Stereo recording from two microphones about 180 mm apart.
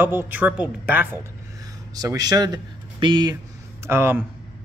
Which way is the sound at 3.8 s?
15° right (ahead or behind).